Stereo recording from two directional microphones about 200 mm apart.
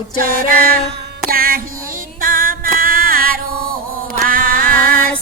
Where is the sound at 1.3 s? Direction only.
45° right (ahead or behind).